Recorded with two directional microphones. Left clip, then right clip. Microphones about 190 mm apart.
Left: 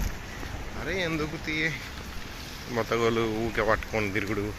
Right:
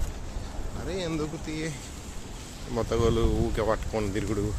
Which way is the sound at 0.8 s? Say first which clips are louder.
Left 2 dB; 10° right (ahead or behind).